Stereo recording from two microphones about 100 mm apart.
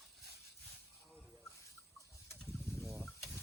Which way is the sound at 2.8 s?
Centre (ahead or behind).